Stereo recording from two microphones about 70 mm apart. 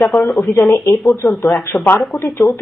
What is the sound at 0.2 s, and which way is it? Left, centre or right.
Speech, centre.